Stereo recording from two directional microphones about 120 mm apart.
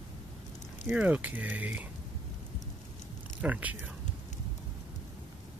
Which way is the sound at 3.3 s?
10° right (ahead or behind).